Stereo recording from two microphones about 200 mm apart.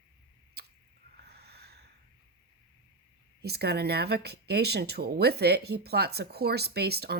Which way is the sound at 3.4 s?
55° right (ahead or behind).